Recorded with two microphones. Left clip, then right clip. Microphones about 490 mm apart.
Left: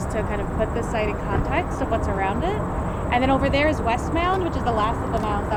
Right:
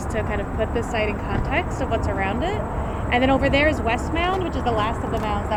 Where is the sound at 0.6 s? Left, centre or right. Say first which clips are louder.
Right 1 dB; right.